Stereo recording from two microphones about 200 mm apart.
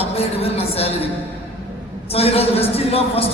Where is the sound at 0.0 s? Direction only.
30° left (ahead or behind).